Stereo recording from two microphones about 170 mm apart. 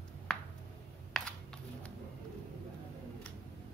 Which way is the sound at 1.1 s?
Centre (ahead or behind).